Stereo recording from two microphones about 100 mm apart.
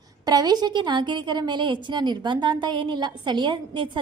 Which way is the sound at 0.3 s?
40° right (ahead or behind).